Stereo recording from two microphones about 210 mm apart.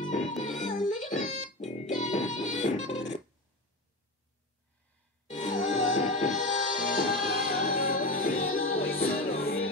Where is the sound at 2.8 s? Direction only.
60° left (ahead or behind).